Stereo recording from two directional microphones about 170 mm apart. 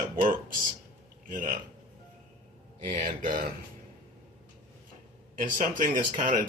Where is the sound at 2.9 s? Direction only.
55° right (ahead or behind).